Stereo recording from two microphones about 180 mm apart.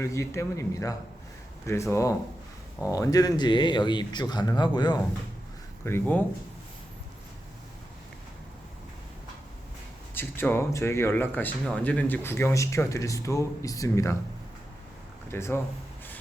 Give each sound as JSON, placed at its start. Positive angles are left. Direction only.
{"t": 0.0, "sound": "speech", "side_deg": 15}
{"t": 5.8, "sound": "speech", "side_deg": 10}
{"t": 10.2, "sound": "speech", "side_deg": 10}
{"t": 15.3, "sound": "speech", "side_deg": 15}